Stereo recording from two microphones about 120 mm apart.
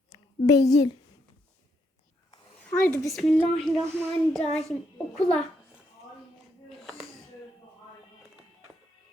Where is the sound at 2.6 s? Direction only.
10° left (ahead or behind).